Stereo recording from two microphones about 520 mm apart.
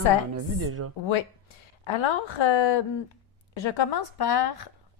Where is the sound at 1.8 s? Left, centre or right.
Left.